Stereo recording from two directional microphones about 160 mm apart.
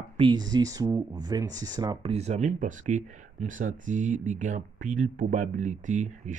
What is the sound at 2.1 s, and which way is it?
Speech, 45° right (ahead or behind).